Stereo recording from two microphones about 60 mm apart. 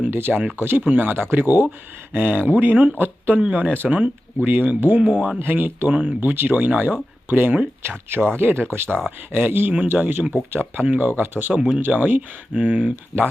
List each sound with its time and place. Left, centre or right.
0.1 s speech: right